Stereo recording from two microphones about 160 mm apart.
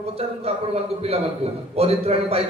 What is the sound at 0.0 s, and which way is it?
Speech, 40° right (ahead or behind).